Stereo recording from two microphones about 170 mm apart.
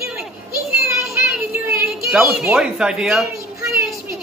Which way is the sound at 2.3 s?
5° right (ahead or behind).